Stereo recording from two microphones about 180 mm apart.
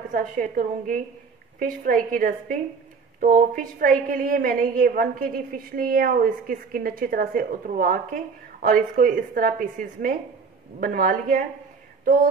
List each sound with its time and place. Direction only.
0.1 s a woman's voice: 50° right (ahead or behind)